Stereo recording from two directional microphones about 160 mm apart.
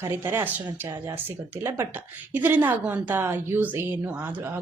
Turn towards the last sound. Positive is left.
turn(degrees=-15)  # may be behind; listen again after turning